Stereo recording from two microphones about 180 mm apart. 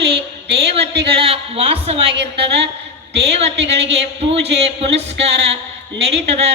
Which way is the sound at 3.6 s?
35° right (ahead or behind).